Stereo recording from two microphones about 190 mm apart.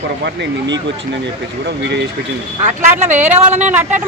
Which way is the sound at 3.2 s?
35° right (ahead or behind).